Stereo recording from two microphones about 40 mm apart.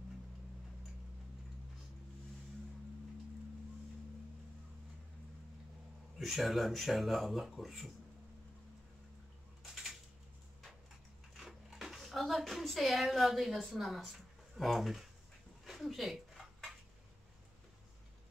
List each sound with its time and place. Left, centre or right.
6.1 s speech: centre
11.3 s a sound: centre
14.6 s speech: centre